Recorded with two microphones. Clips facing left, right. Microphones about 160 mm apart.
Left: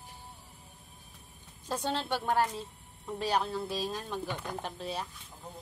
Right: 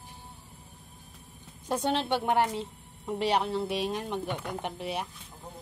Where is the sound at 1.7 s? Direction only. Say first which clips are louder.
Right 5 dB; 20° right (ahead or behind).